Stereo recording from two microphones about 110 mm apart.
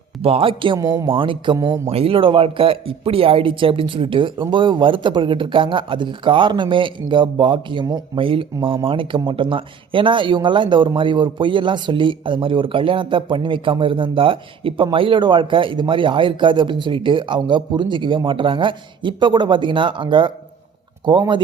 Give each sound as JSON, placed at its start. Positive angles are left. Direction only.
{"t": 0.2, "sound": "speech", "side_deg": -60}
{"t": 0.8, "sound": "speech", "side_deg": -30}
{"t": 1.0, "sound": "speech", "side_deg": -55}
{"t": 8.2, "sound": "speech", "side_deg": -55}